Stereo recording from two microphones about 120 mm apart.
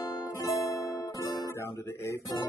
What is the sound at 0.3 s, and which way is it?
Music, 25° left (ahead or behind).